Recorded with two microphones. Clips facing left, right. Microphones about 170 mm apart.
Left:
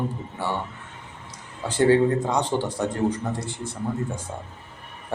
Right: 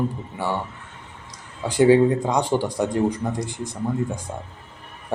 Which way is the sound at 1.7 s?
15° right (ahead or behind).